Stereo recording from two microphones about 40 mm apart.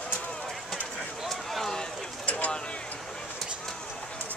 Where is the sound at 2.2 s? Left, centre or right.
Left.